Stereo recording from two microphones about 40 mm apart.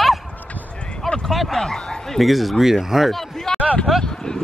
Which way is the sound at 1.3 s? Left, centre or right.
Centre.